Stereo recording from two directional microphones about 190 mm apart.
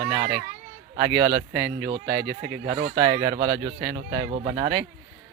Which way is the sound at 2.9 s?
25° right (ahead or behind).